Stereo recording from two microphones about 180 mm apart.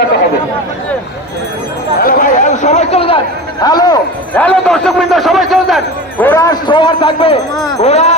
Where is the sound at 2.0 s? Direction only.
50° left (ahead or behind); by 3.2 s 35° left (ahead or behind).